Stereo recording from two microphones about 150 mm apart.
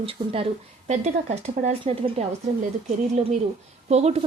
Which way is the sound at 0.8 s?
50° right (ahead or behind).